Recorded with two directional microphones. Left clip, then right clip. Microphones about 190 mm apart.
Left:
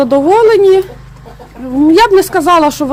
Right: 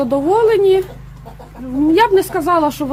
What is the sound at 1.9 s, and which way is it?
Speech, 25° left (ahead or behind).